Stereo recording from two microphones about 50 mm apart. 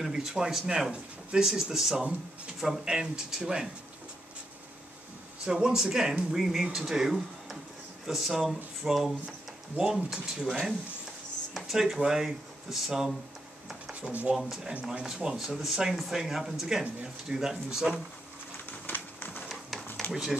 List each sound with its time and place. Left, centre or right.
0.0 s speech: centre
5.4 s speech: centre
9.8 s speech: right
14.0 s speech: right
14.9 s speech: centre
18.7 s a sound: left